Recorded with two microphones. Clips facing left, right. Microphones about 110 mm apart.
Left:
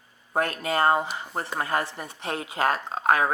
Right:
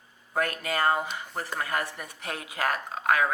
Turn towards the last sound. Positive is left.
turn(degrees=30)  # may be behind; listen again after turning